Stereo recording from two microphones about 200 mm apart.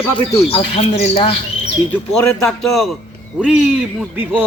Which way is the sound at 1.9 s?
5° left (ahead or behind).